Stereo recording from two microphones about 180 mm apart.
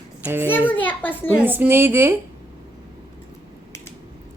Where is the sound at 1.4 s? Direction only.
10° right (ahead or behind).